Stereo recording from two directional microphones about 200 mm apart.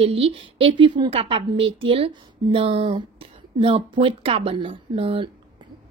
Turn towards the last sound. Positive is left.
turn(degrees=-30)  # may be behind; listen again after turning